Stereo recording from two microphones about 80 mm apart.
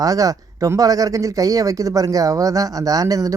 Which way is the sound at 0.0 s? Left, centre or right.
Right.